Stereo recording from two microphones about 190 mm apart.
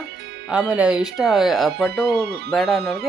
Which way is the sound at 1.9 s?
60° right (ahead or behind).